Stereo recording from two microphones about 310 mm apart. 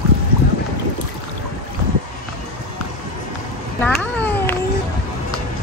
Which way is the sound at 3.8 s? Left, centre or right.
Centre.